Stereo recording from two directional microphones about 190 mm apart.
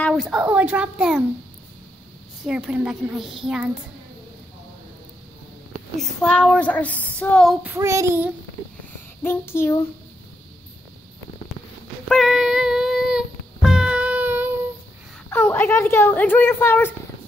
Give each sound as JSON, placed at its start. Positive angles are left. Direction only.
{"t": 0.0, "sound": "speech", "side_deg": 0}
{"t": 2.4, "sound": "speech", "side_deg": -5}
{"t": 5.9, "sound": "speech", "side_deg": 5}
{"t": 7.6, "sound": "child singing", "side_deg": -15}
{"t": 9.2, "sound": "a woman's voice", "side_deg": 10}
{"t": 12.1, "sound": "child singing", "side_deg": 0}
{"t": 15.2, "sound": "a woman's voice", "side_deg": 10}